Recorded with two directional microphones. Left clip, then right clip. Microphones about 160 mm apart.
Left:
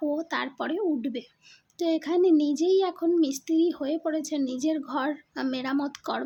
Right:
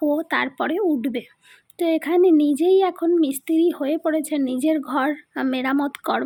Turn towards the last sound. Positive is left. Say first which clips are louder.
# right 7 dB
turn(degrees=-25)  # may be behind; listen again after turning